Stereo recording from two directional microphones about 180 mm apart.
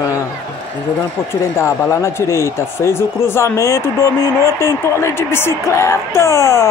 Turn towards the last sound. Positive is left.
turn(degrees=15)  # may be behind; listen again after turning